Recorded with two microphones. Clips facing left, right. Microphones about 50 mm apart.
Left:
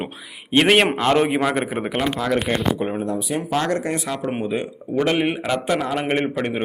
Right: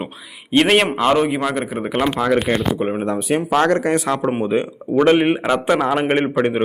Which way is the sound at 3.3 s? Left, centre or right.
Right.